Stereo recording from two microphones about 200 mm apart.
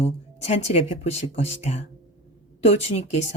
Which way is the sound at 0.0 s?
35° left (ahead or behind).